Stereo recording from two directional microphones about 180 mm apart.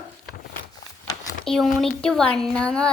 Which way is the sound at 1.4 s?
5° left (ahead or behind).